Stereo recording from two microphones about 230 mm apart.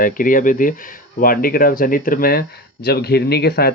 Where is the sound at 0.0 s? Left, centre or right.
Left.